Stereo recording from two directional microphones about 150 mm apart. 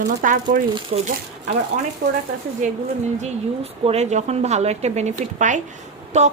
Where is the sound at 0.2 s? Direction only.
65° right (ahead or behind).